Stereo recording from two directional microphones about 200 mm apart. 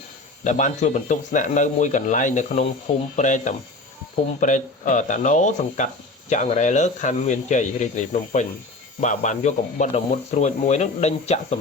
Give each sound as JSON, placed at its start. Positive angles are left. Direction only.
{"t": 0.4, "sound": "speech", "side_deg": 35}